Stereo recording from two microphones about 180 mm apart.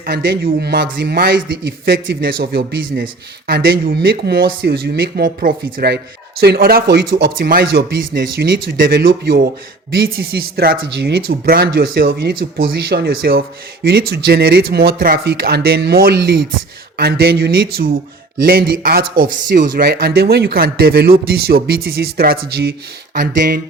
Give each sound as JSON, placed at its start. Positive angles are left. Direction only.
{"t": 0.0, "sound": "speech", "side_deg": -55}